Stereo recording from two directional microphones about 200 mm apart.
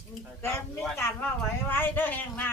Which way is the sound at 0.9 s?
10° left (ahead or behind).